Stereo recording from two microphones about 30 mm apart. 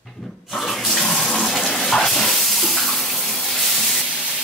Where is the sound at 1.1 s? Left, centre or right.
Left.